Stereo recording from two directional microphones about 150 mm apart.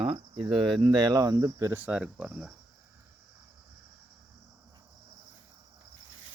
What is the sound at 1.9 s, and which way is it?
Speech, 5° right (ahead or behind).